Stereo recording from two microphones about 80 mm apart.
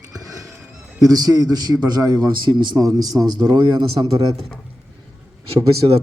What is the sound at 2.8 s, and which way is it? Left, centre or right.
A man's voice, right.